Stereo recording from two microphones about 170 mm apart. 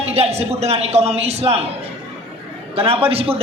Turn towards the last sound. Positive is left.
turn(degrees=-35)  # may be behind; listen again after turning